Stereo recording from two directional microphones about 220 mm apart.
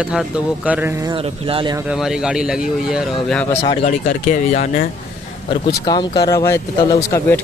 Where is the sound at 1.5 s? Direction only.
20° right (ahead or behind).